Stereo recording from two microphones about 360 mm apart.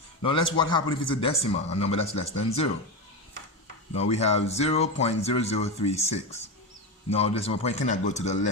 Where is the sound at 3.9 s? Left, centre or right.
Centre.